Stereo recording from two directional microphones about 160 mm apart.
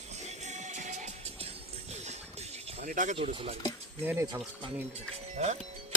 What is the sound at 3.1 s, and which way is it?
Speech, 35° right (ahead or behind).